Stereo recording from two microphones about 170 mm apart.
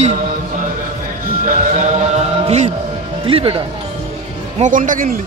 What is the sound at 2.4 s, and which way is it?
Speech, 40° right (ahead or behind).